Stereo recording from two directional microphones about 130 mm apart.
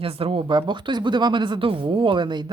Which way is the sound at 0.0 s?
45° right (ahead or behind).